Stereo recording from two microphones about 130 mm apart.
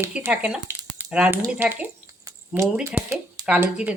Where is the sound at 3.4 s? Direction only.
10° right (ahead or behind).